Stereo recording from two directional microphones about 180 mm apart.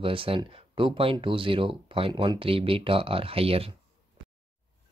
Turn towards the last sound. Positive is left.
turn(degrees=-30)  # may be behind; listen again after turning